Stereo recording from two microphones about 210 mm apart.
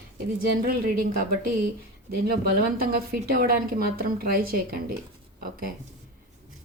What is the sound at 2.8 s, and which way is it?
A woman's voice, 45° right (ahead or behind).